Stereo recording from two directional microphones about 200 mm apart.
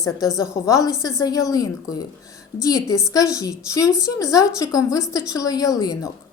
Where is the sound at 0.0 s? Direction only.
15° left (ahead or behind).